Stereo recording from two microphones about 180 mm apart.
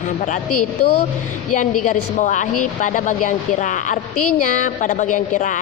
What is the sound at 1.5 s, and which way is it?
A woman's voice, 45° left (ahead or behind).